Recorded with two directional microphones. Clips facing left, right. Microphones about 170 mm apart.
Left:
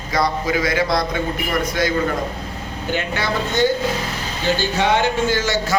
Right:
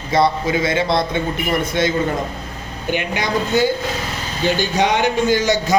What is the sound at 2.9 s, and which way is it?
Speech, 15° right (ahead or behind).